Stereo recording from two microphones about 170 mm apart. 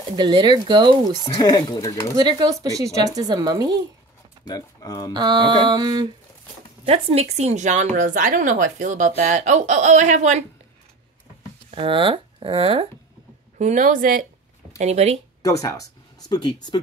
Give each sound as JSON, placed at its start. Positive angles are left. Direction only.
{"t": 0.1, "sound": "speech", "side_deg": -25}
{"t": 1.2, "sound": "speech", "side_deg": 25}
{"t": 2.1, "sound": "speech", "side_deg": -25}
{"t": 4.5, "sound": "speech", "side_deg": 20}
{"t": 5.1, "sound": "speech", "side_deg": -25}
{"t": 6.9, "sound": "speech", "side_deg": -35}
{"t": 11.7, "sound": "speech", "side_deg": -30}
{"t": 13.6, "sound": "speech", "side_deg": -45}
{"t": 14.8, "sound": "speech", "side_deg": -40}
{"t": 15.4, "sound": "speech", "side_deg": 20}